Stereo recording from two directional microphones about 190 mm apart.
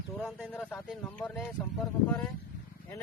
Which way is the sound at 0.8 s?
5° left (ahead or behind).